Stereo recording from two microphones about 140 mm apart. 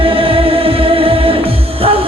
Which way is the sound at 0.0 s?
40° right (ahead or behind).